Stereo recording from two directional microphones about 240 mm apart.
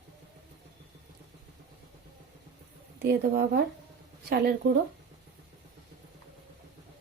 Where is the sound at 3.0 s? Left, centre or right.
Right.